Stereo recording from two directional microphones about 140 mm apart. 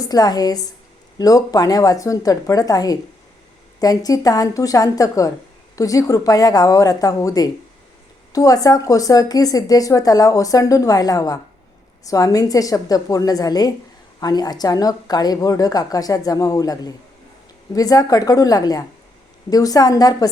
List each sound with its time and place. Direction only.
0.0 s speech: 25° left (ahead or behind)